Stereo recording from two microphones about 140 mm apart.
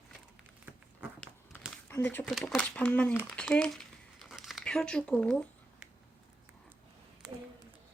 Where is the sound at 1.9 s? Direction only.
15° left (ahead or behind).